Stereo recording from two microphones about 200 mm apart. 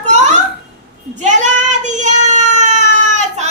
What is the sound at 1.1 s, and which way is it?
Child singing, 35° right (ahead or behind).